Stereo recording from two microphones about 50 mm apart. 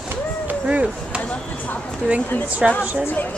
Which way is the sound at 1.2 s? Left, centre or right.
Left.